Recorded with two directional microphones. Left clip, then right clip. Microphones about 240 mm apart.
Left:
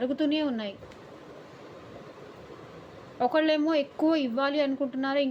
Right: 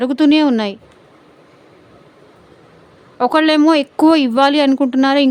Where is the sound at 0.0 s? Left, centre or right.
Right.